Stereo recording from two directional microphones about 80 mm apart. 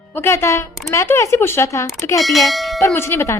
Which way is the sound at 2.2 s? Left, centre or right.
Centre.